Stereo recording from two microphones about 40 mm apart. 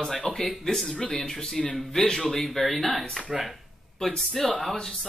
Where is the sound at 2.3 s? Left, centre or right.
Centre.